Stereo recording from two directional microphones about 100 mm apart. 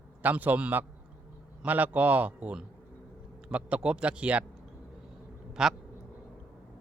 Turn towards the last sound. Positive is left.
turn(degrees=-5)  # may be behind; listen again after turning